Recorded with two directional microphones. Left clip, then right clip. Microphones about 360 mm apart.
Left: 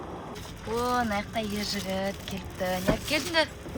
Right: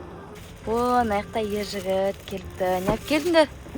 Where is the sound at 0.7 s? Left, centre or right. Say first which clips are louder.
Right 6 dB; centre.